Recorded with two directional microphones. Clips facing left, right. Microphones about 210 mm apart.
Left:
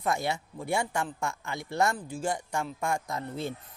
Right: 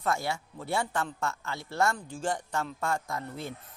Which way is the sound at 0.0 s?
15° left (ahead or behind).